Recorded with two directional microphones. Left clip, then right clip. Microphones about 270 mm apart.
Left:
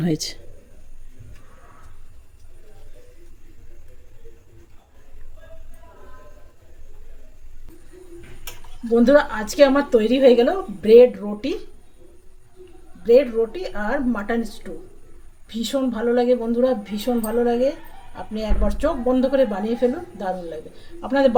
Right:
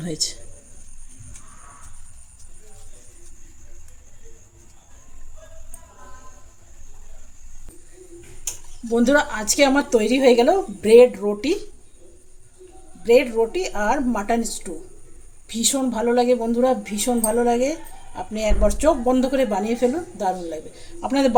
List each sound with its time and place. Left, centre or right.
0.0 s speech: left
8.9 s a woman's voice: centre
13.1 s a woman's voice: centre